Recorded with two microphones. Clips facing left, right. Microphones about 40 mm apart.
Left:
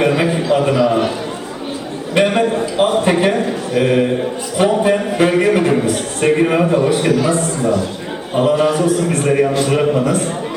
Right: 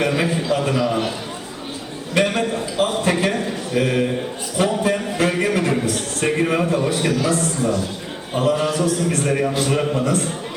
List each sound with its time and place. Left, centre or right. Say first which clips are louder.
0.0 s a sound: left 5 dB; centre
0.4 s a man's voice: left 6 dB; centre
2.1 s a man's voice: left 5 dB; left
6.2 s a man's voice: left 6 dB; centre
7.3 s a man's voice: left 4 dB; left